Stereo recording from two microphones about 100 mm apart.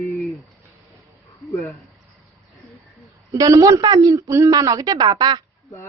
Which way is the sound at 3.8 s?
45° right (ahead or behind).